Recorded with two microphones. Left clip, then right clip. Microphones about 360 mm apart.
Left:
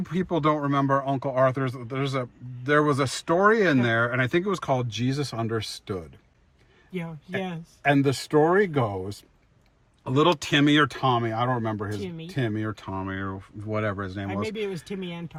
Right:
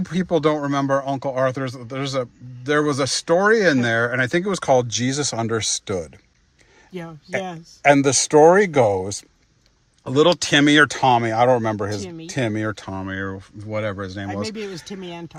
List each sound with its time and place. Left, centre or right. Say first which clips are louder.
0.0 s speech: right 5 dB; centre
7.3 s speech: right 7 dB; centre
10.0 s speech: right 5 dB; centre